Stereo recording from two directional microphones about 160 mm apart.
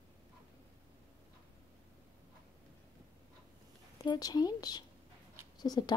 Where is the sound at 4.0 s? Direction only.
25° left (ahead or behind).